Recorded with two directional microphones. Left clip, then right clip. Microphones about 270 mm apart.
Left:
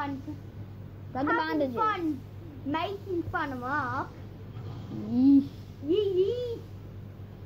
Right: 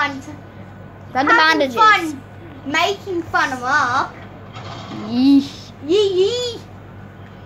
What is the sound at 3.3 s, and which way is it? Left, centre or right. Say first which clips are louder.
Speech: right 16 dB; centre.